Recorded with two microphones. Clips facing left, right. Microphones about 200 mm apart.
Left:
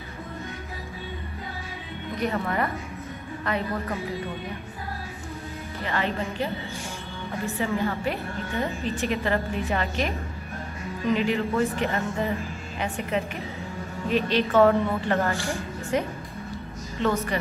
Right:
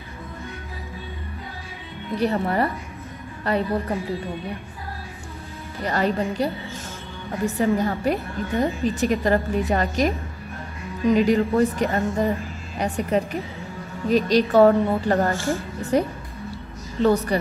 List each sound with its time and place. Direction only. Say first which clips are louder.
2.1 s a woman's voice: right 5 dB; 35° right (ahead or behind)
5.8 s a woman's voice: right 6 dB; 40° right (ahead or behind)
7.5 s a woman's voice: right 5 dB; 45° right (ahead or behind)
11.1 s a woman's voice: right 6 dB; 40° right (ahead or behind)
15.3 s speech: right 5 dB; 15° left (ahead or behind)
15.8 s music: right 5 dB; 35° right (ahead or behind)
17.0 s a woman's voice: right 6 dB; 35° right (ahead or behind)